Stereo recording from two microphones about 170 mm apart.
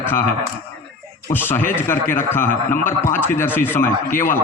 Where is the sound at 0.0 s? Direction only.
10° left (ahead or behind).